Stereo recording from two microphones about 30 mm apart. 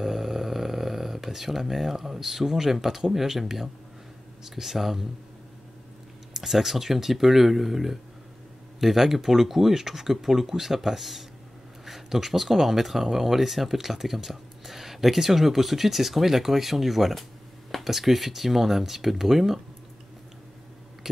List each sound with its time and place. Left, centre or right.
0.0 s speech: centre
6.3 s speech: centre